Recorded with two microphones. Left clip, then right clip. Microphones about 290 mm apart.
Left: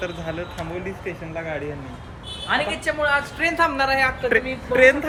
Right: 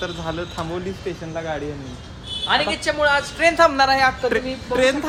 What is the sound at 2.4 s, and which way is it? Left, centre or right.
Speech, right.